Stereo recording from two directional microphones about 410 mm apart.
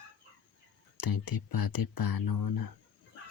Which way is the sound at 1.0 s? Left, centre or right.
Left.